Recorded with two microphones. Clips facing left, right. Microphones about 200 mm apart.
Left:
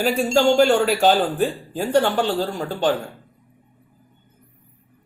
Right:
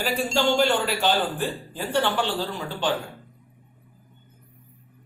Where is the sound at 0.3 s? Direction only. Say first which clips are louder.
Left 6 dB; 45° left (ahead or behind).